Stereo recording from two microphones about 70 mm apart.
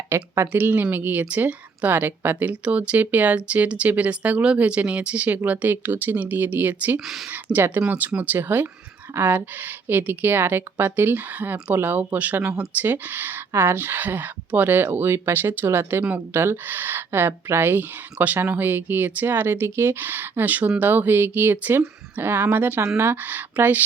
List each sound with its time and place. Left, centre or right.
0.1 s speech: right